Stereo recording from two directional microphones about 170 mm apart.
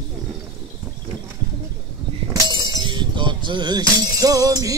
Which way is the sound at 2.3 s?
20° right (ahead or behind).